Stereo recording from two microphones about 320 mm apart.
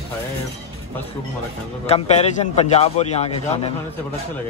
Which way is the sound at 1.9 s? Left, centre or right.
Centre.